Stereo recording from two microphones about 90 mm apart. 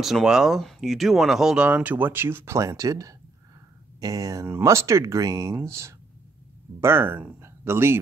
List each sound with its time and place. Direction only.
0.0 s speech: 5° right (ahead or behind); by 4.5 s 40° right (ahead or behind)
4.5 s speech: 30° right (ahead or behind)